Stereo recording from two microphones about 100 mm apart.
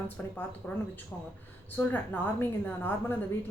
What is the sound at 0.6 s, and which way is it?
Speech, 5° left (ahead or behind).